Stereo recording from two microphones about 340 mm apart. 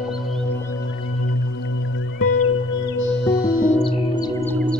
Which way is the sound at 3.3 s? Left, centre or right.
Left.